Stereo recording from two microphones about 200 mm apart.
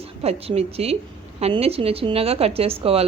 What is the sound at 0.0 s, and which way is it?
A woman's voice, 30° right (ahead or behind).